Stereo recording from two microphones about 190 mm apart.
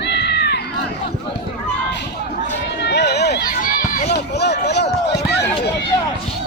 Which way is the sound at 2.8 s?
60° left (ahead or behind).